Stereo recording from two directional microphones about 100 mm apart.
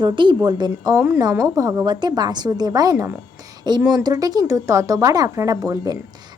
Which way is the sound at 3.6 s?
45° right (ahead or behind).